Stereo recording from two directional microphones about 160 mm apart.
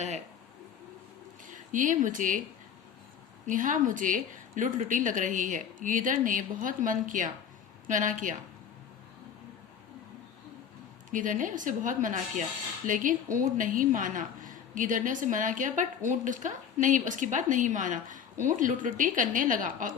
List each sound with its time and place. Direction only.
1.5 s speech: 55° right (ahead or behind)
3.4 s a woman's voice: 55° right (ahead or behind)
11.1 s a woman's voice: 55° right (ahead or behind)